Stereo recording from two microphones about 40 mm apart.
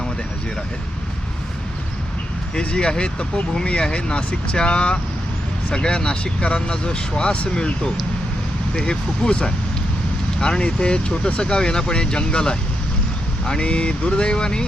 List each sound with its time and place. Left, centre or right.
2.6 s speech: left
8.7 s speech: left